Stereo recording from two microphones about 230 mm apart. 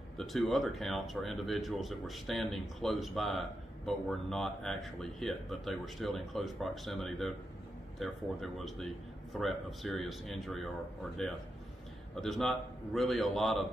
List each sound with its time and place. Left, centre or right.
0.2 s speech: centre
12.2 s speech: centre